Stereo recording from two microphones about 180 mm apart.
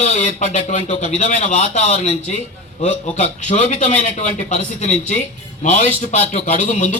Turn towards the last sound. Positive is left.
turn(degrees=40)  # may be behind; listen again after turning